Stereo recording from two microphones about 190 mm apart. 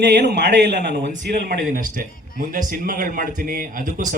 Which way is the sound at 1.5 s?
45° right (ahead or behind).